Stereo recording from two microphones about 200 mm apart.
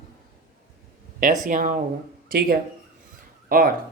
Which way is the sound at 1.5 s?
40° right (ahead or behind).